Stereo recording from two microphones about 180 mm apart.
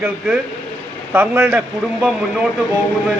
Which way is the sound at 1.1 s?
10° right (ahead or behind).